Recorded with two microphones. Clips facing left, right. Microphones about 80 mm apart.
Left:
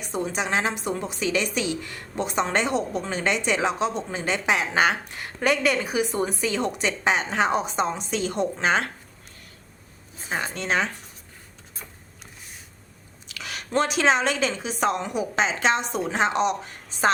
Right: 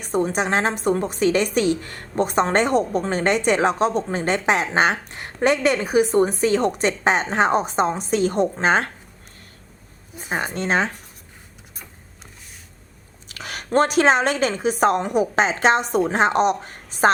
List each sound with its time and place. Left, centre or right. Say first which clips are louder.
0.0 s a woman's voice: right 6 dB; right
10.3 s a woman's voice: right 4 dB; right
13.2 s a woman's voice: right 3 dB; right